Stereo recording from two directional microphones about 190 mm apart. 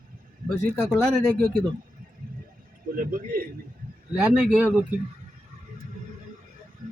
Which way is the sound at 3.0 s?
45° right (ahead or behind).